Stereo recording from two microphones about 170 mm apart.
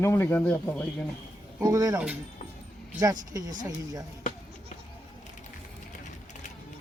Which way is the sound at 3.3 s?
20° right (ahead or behind).